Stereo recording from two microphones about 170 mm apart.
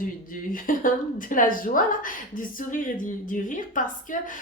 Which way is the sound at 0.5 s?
55° left (ahead or behind).